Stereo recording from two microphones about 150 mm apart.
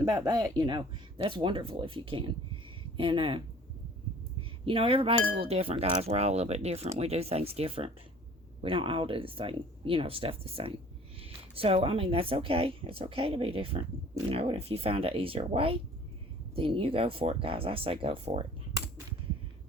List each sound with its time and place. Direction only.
0.1 s speech: 25° right (ahead or behind)
4.4 s cutlery: 35° right (ahead or behind)
5.4 s speech: 40° right (ahead or behind)